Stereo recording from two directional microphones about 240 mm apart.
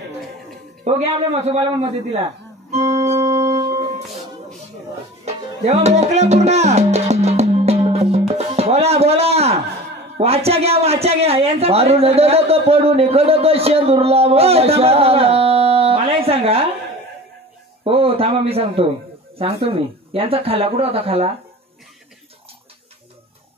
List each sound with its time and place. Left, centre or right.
1.4 s speech: right
3.2 s music: centre
5.2 s music: right
10.1 s a woman's voice: right
17.8 s speech: right